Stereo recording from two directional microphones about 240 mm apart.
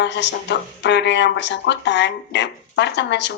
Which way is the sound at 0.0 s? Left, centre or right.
Left.